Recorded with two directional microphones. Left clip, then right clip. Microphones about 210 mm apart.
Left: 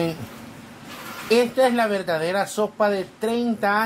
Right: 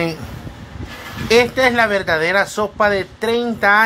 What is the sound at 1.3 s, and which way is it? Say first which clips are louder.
Speech: right 5 dB; 20° right (ahead or behind).